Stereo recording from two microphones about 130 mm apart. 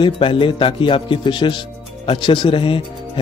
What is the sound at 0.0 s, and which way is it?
Speech, 40° left (ahead or behind).